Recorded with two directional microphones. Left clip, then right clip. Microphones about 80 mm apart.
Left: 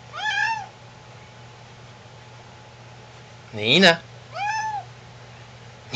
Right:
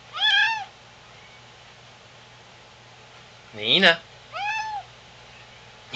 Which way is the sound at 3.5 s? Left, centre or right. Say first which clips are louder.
Left 2 dB; left.